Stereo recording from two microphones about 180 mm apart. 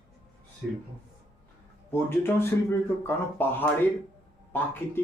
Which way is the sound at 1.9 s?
15° left (ahead or behind).